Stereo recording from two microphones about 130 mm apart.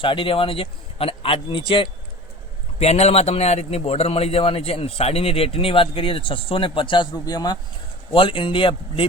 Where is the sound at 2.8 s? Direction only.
55° left (ahead or behind).